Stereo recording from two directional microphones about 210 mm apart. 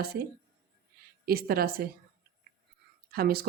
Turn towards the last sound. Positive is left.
turn(degrees=-45)  # may be behind; listen again after turning